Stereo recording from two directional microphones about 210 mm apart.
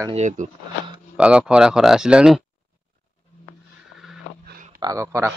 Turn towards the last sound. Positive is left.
turn(degrees=-10)  # may be behind; listen again after turning